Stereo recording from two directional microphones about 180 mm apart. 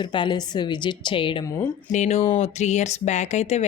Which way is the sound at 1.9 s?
40° left (ahead or behind).